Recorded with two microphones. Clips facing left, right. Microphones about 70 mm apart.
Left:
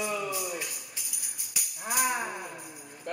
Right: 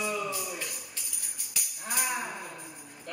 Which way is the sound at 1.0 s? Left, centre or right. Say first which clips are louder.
Even; centre.